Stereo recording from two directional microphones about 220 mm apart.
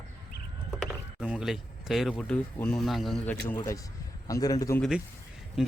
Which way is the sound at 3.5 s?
15° left (ahead or behind).